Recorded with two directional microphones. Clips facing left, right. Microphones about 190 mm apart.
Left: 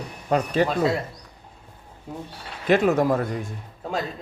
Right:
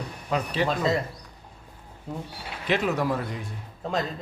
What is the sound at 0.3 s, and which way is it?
Speech, 45° left (ahead or behind).